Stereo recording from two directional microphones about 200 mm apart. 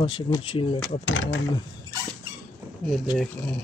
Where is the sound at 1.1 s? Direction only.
80° left.